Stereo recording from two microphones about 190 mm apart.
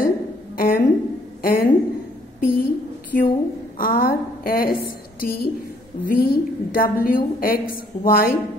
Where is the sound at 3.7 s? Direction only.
50° left (ahead or behind).